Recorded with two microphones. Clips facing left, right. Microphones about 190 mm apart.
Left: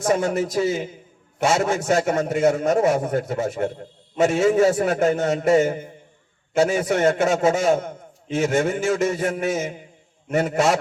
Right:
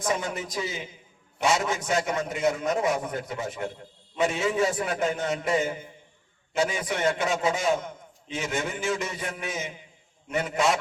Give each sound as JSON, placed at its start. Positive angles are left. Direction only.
{"t": 0.0, "sound": "a man's voice", "side_deg": 50}